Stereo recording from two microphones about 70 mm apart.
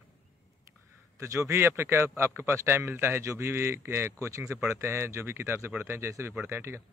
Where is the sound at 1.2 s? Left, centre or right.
Right.